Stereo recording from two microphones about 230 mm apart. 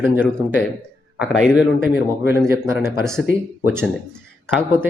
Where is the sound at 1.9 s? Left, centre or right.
Left.